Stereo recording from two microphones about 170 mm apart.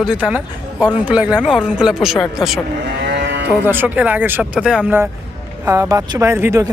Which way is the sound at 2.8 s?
90° right.